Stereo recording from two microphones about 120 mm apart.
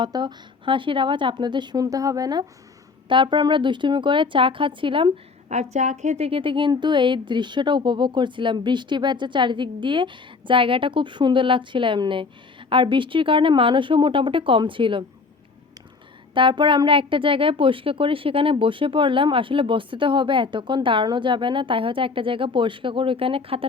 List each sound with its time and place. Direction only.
0.0 s speech: 35° right (ahead or behind)
5.7 s speech: 75° right (ahead or behind); by 15.0 s 45° right (ahead or behind)
16.3 s speech: 45° right (ahead or behind)